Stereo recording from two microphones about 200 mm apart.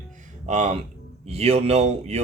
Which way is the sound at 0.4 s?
35° right (ahead or behind).